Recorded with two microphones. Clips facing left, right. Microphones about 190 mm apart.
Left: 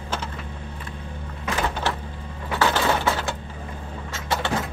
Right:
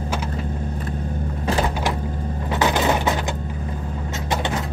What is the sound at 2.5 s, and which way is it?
Coin, 20° right (ahead or behind).